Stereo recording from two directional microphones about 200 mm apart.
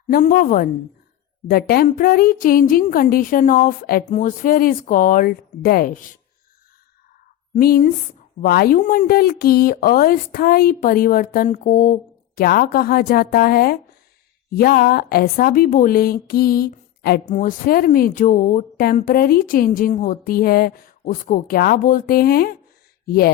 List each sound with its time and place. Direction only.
0.1 s speech: 45° left (ahead or behind)
7.5 s speech: 40° left (ahead or behind)